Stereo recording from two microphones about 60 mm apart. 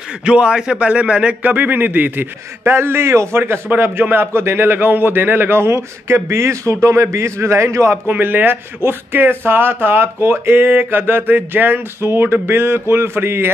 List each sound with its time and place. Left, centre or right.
0.2 s a man's voice: centre; by 8.0 s right
8.1 s a man's voice: right
10.7 s a man's voice: right